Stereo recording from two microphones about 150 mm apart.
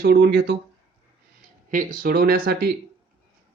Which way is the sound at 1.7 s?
65° right (ahead or behind).